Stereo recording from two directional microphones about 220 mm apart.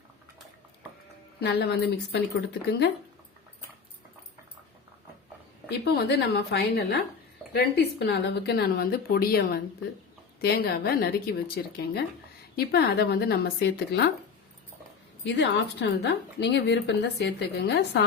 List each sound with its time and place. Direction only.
1.4 s a woman's voice: 50° left (ahead or behind)
5.6 s a woman's voice: 50° left (ahead or behind)
15.2 s a woman's voice: 55° left (ahead or behind)